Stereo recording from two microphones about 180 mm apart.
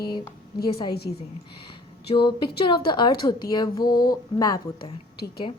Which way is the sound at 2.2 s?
25° left (ahead or behind).